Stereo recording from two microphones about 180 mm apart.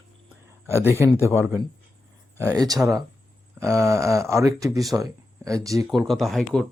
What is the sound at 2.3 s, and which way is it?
Speech, 20° right (ahead or behind).